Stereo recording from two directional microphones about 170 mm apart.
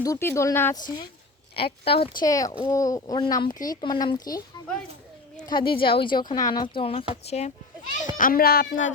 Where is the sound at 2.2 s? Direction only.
20° left (ahead or behind).